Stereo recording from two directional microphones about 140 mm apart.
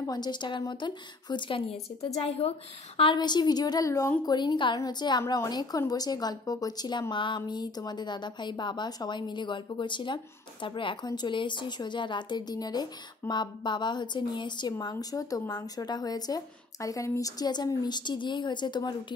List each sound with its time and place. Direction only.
0.0 s a woman's voice: 30° left (ahead or behind); by 2.5 s 45° left (ahead or behind)
3.0 s a woman's voice: 35° left (ahead or behind)